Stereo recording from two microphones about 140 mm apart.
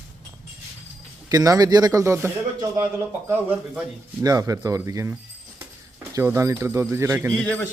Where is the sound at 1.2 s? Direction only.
25° right (ahead or behind).